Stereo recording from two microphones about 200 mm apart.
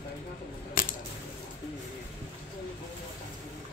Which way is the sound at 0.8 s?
45° left (ahead or behind).